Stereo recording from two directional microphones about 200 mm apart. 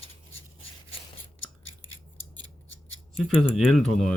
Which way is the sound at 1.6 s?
75° left (ahead or behind).